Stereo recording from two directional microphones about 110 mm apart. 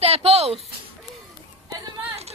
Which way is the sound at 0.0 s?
65° right (ahead or behind).